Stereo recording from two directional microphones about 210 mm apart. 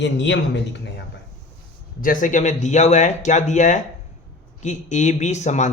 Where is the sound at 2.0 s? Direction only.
40° left (ahead or behind).